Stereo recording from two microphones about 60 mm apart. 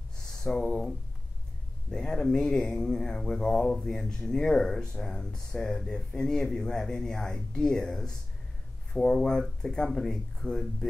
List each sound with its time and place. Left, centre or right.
0.4 s speech: centre
1.9 s speech: centre